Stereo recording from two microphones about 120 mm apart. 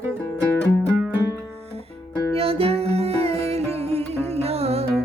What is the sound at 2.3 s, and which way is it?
Music, 55° right (ahead or behind).